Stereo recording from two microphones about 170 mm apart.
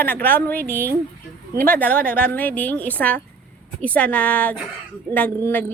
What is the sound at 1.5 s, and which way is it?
Speech, 55° right (ahead or behind).